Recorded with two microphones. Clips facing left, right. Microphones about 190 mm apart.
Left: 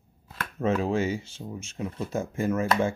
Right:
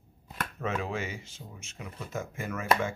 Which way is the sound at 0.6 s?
30° left (ahead or behind).